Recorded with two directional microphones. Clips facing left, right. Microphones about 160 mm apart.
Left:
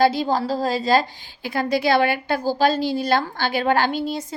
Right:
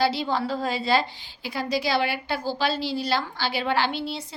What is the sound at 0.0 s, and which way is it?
A woman's voice, 45° left (ahead or behind).